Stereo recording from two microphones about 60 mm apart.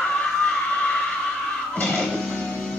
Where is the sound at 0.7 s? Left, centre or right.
Centre.